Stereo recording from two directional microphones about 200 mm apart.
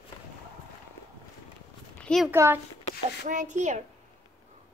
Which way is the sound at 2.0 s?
5° left (ahead or behind).